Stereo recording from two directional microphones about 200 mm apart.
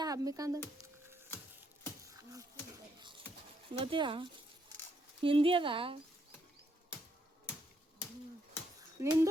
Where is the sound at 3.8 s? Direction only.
25° right (ahead or behind).